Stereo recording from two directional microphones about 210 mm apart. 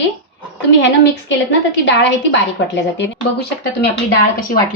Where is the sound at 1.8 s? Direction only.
55° left (ahead or behind).